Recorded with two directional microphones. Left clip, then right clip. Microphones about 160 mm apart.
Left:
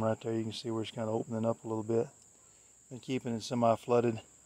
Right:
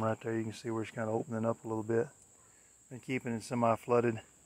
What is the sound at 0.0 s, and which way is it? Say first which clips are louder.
Speech: left 1 dB; 30° left (ahead or behind).